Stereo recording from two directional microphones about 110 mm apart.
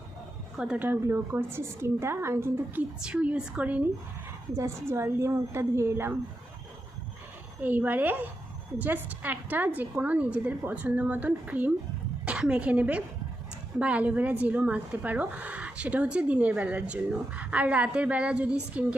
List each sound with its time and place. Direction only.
0.5 s speech: 10° right (ahead or behind)
0.9 s a woman's voice: 20° right (ahead or behind)
3.0 s speech: 10° right (ahead or behind)
4.5 s a woman's voice: 25° right (ahead or behind)
7.6 s a woman's voice: 15° right (ahead or behind)